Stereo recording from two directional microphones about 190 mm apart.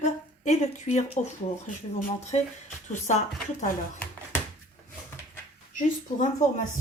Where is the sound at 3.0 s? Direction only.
40° left (ahead or behind).